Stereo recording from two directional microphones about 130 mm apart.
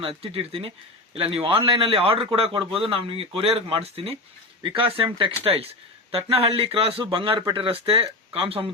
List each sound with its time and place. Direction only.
0.0 s a man's voice: 45° right (ahead or behind)